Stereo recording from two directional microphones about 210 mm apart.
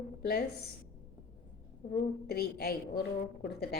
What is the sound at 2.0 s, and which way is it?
A woman's voice, 50° left (ahead or behind).